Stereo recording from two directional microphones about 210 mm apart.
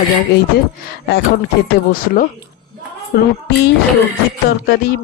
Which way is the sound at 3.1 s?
45° left (ahead or behind).